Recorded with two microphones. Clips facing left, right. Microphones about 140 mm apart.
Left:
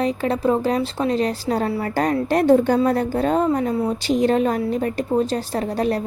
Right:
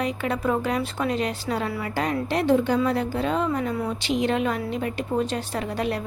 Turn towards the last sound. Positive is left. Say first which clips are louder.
# left 5 dB
turn(degrees=40)  # may be behind; listen again after turning